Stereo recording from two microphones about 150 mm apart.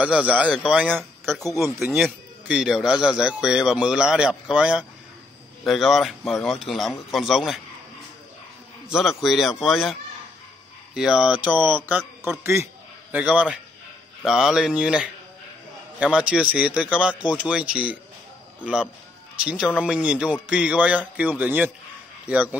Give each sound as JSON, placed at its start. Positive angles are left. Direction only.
{"t": 0.0, "sound": "speech", "side_deg": -10}
{"t": 8.8, "sound": "speech", "side_deg": 0}
{"t": 11.0, "sound": "a man's voice", "side_deg": -5}